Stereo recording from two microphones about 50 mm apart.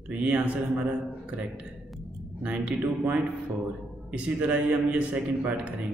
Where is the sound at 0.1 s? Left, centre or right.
Right.